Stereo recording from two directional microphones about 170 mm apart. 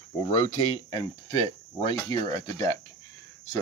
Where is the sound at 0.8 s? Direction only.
25° left (ahead or behind).